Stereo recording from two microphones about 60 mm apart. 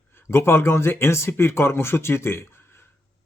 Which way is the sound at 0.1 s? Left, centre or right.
Left.